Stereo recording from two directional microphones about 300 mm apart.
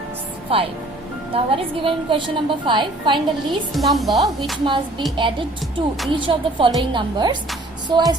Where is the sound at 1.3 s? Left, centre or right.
Centre.